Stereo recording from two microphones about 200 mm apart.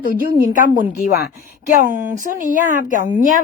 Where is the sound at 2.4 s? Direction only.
40° left (ahead or behind).